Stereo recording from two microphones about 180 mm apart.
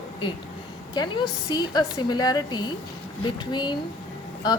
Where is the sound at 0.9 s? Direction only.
25° left (ahead or behind).